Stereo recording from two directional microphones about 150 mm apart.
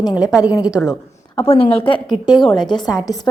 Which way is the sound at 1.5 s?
40° left (ahead or behind).